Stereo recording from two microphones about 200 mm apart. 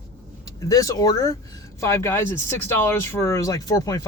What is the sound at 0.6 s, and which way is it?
Speech, 15° left (ahead or behind).